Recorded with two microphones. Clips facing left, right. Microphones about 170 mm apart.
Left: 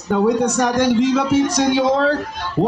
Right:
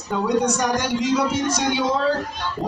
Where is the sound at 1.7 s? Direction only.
90° left.